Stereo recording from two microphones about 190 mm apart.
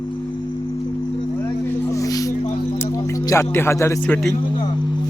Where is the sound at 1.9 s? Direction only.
15° left (ahead or behind).